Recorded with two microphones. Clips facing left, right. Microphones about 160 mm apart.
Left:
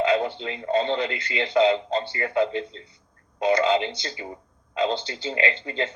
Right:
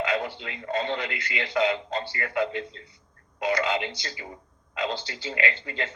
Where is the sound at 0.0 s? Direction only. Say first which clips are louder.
Left 6 dB; 25° left (ahead or behind).